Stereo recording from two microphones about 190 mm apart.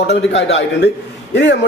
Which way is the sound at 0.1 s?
65° left (ahead or behind).